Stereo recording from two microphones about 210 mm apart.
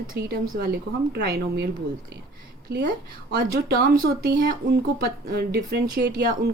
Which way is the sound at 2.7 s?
50° right (ahead or behind).